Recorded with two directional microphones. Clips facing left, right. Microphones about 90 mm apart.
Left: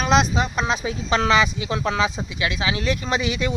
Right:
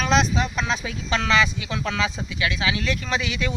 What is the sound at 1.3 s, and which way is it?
Speech, 15° left (ahead or behind).